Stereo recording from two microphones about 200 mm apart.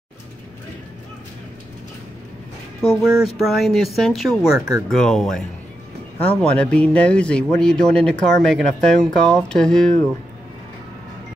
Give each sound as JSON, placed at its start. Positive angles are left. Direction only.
{"t": 3.0, "sound": "speech", "side_deg": -5}
{"t": 4.6, "sound": "speech", "side_deg": -15}
{"t": 4.8, "sound": "speech", "side_deg": 0}